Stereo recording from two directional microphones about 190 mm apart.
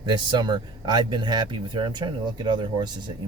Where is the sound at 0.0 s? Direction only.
25° right (ahead or behind).